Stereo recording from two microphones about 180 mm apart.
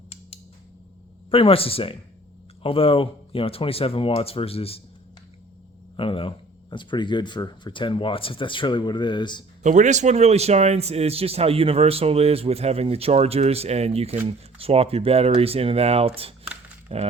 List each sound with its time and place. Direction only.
1.3 s speech: 30° left (ahead or behind)
6.0 s speech: 30° left (ahead or behind)
9.6 s a man's voice: 40° right (ahead or behind)